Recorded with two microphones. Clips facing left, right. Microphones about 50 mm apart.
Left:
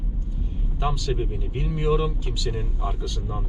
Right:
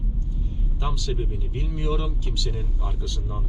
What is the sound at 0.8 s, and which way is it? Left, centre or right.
Speech, centre.